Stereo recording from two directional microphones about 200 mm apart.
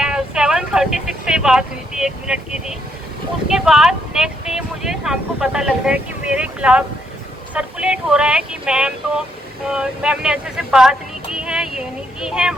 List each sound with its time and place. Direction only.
0.0 s speech: 5° right (ahead or behind)